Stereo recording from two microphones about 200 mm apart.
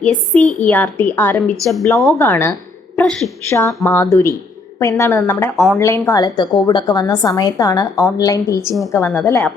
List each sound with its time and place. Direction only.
0.0 s a woman's voice: 5° left (ahead or behind)
3.5 s a woman's voice: 15° left (ahead or behind)
5.5 s a woman's voice: centre (ahead or behind)
5.8 s a woman's voice: 15° left (ahead or behind)